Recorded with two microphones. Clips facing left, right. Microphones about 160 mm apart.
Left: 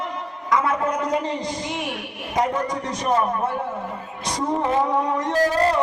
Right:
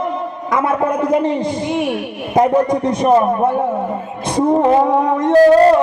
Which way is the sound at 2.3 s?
55° right (ahead or behind).